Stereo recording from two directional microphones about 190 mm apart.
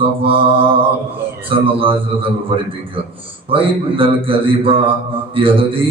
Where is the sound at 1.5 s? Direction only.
30° right (ahead or behind).